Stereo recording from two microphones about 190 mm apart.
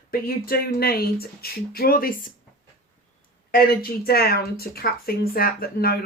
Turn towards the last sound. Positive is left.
turn(degrees=50)  # may be behind; listen again after turning